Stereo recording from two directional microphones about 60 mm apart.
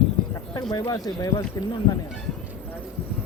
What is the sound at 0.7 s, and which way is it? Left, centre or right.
Speech, left.